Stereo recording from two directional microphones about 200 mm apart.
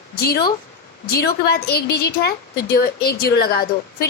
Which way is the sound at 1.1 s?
50° left (ahead or behind).